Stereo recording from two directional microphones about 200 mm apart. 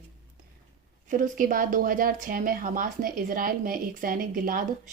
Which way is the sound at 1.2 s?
45° right (ahead or behind).